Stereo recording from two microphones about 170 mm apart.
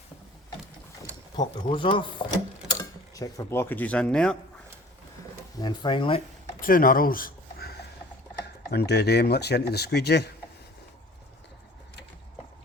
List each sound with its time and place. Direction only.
1.4 s speech: 30° left (ahead or behind)
3.2 s speech: 15° left (ahead or behind)
5.5 s speech: 25° left (ahead or behind)
6.6 s speech: 55° left (ahead or behind)
8.7 s speech: 75° left (ahead or behind)